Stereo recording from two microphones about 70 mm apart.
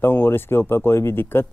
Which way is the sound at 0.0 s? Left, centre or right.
Left.